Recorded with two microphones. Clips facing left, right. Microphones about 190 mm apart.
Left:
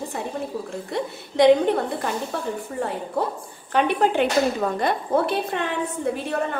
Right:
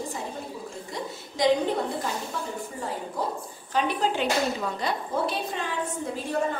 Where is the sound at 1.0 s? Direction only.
65° left (ahead or behind).